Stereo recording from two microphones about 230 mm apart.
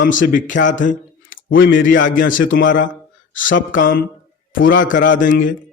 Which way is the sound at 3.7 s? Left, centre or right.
Left.